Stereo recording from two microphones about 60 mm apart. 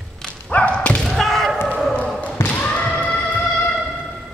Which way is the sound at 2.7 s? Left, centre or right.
Left.